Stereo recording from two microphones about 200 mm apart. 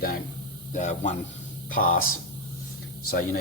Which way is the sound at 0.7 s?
35° left (ahead or behind).